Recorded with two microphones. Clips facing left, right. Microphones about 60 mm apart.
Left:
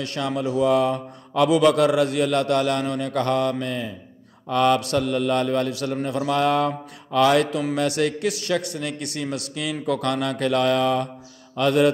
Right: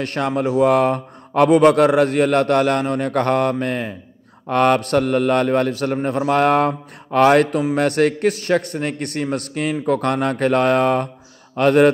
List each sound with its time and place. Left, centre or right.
0.0 s speech: right